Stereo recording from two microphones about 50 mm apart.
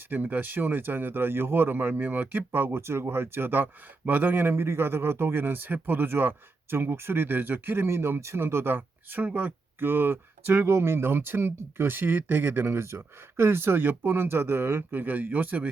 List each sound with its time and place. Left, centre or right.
0.1 s speech: right
2.8 s speech: right
7.9 s speech: right
9.2 s speech: right